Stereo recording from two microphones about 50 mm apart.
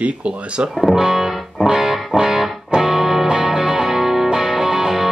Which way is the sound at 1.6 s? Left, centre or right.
Centre.